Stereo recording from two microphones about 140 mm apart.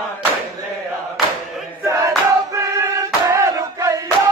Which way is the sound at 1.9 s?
25° right (ahead or behind).